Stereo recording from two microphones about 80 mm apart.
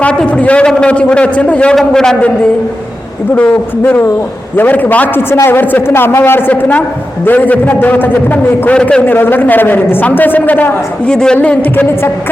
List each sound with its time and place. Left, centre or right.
0.0 s a man's voice: centre
3.3 s a man's voice: centre
9.0 s a man's voice: left; by 11.3 s centre
11.3 s a man's voice: left